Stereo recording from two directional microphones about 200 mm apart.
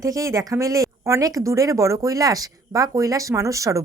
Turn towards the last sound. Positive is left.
turn(degrees=-15)  # may be behind; listen again after turning